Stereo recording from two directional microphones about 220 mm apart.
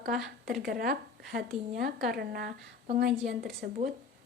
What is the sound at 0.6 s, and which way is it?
A woman's voice, 40° right (ahead or behind).